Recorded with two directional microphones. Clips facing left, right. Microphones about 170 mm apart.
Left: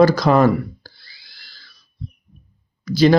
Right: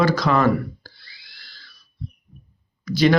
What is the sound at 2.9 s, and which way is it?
Speech, 35° left (ahead or behind).